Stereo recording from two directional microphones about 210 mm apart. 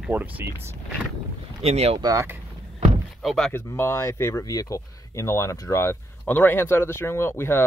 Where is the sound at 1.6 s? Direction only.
30° right (ahead or behind).